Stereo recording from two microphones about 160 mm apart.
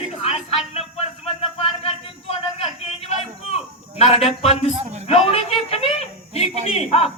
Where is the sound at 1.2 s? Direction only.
40° left (ahead or behind).